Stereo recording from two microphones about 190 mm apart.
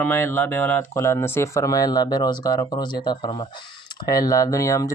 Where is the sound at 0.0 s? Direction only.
10° left (ahead or behind).